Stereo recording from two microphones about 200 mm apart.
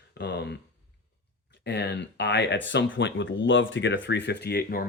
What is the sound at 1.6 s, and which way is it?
Speech, 60° left (ahead or behind).